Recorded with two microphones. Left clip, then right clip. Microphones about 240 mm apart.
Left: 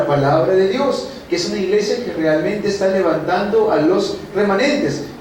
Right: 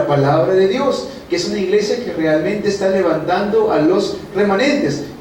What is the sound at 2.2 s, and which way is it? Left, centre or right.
A man's voice, centre.